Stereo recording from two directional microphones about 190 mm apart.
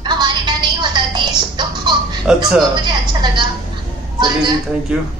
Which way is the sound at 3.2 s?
20° right (ahead or behind).